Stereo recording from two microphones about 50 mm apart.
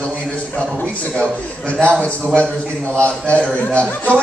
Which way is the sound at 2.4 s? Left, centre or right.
Left.